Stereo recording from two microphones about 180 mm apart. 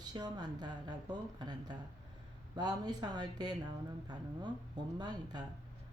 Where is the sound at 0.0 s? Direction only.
20° right (ahead or behind).